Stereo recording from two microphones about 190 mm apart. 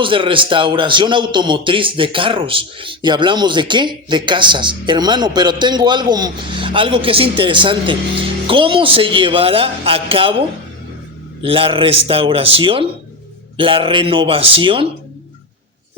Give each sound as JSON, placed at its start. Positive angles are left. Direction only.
{"t": 0.0, "sound": "a man's voice", "side_deg": -25}
{"t": 11.4, "sound": "a man's voice", "side_deg": -30}